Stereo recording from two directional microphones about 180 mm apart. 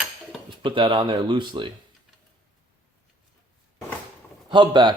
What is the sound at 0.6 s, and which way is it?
Speech, 25° right (ahead or behind).